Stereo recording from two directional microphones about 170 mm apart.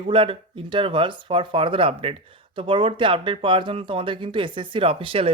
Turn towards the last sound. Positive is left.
turn(degrees=-30)  # may be behind; listen again after turning